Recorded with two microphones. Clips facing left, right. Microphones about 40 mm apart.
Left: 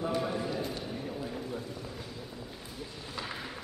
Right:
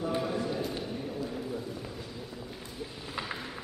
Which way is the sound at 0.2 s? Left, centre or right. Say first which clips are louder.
Right 1 dB; centre.